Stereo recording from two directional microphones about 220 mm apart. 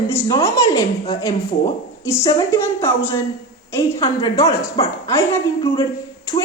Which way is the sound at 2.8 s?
10° left (ahead or behind).